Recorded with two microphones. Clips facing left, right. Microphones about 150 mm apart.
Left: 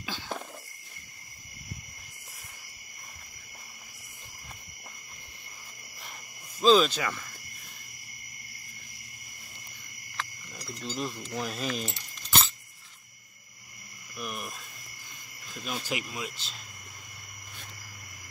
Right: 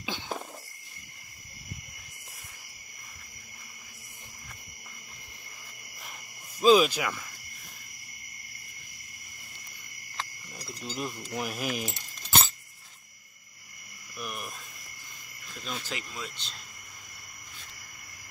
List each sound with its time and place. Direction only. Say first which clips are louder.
0.0 s a sound: right 1 dB; 15° right (ahead or behind)
6.6 s speech: right 1 dB; 10° right (ahead or behind)
10.8 s speech: left 1 dB; 10° right (ahead or behind)
12.3 s bicycle bell: right 1 dB; 40° right (ahead or behind)
14.1 s cricket: left 1 dB; centre (ahead or behind)
15.8 s speech: left 4 dB; 15° left (ahead or behind)
16.3 s cricket: even; centre (ahead or behind)